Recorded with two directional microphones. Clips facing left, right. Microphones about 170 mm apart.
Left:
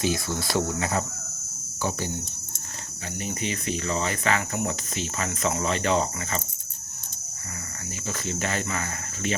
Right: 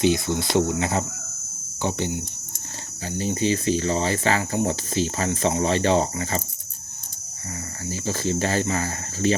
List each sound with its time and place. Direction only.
0.0 s speech: 25° right (ahead or behind)
7.9 s speech: 30° right (ahead or behind)